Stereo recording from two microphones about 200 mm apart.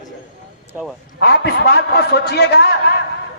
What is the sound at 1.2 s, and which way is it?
A man's voice, 55° left (ahead or behind).